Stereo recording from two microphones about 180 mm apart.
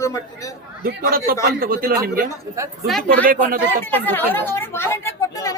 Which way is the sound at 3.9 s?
10° left (ahead or behind).